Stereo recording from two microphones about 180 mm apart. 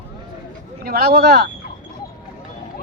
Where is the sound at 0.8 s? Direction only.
60° right (ahead or behind).